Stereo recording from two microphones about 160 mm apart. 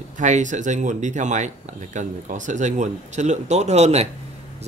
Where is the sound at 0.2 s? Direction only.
50° right (ahead or behind).